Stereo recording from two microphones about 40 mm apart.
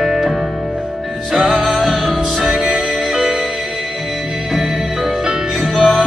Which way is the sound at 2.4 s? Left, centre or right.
Centre.